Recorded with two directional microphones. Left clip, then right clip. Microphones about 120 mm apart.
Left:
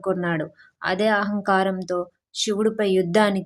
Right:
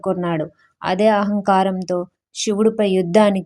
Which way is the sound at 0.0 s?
30° right (ahead or behind).